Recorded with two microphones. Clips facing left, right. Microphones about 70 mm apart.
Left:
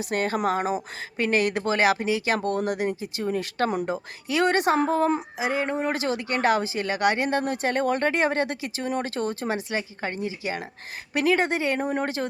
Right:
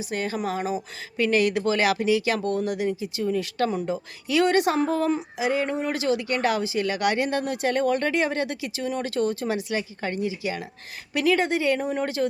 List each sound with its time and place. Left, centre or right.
0.0 s speech: left